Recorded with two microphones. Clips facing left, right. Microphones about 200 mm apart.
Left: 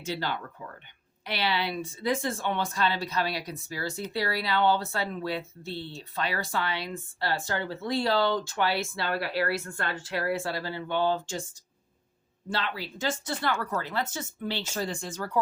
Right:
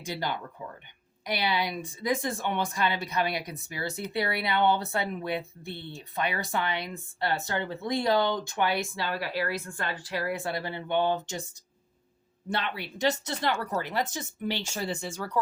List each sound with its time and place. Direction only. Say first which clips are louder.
0.0 s speech: left 1 dB; 15° right (ahead or behind)
12.5 s speech: even; 20° right (ahead or behind)